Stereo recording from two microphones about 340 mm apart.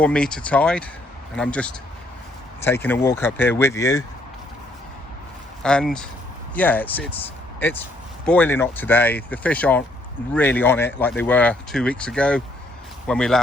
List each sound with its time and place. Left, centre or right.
0.0 s speech: centre
5.6 s speech: centre